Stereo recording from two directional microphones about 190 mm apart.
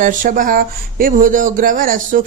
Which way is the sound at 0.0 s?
45° right (ahead or behind).